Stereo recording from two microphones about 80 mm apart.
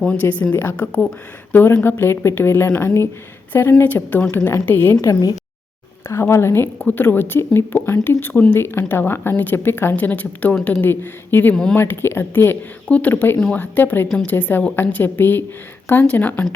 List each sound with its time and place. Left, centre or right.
0.0 s speech: centre
6.1 s speech: left
11.5 s speech: centre
11.8 s speech: left